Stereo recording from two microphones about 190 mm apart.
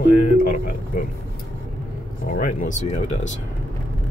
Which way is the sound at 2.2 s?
45° left (ahead or behind).